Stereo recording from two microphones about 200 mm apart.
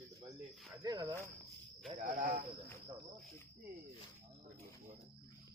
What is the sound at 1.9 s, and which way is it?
Speech, 35° right (ahead or behind).